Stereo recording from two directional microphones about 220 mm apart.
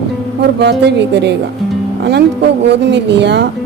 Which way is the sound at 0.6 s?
50° right (ahead or behind).